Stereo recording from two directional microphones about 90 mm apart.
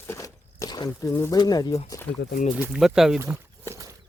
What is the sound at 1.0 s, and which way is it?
Speech, 30° left (ahead or behind).